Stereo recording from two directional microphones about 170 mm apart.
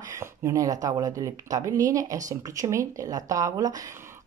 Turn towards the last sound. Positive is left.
turn(degrees=-20)  # may be behind; listen again after turning